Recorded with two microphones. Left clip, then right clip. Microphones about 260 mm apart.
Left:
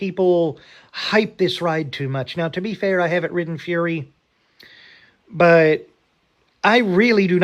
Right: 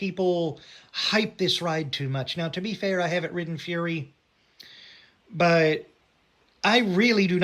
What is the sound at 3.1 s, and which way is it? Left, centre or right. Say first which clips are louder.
Speech: left 7 dB; left.